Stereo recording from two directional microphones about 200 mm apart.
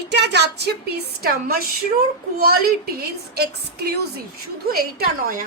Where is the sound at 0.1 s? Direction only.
55° right (ahead or behind).